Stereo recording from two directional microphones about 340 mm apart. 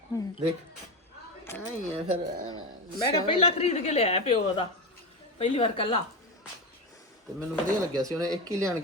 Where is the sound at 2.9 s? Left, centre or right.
Centre.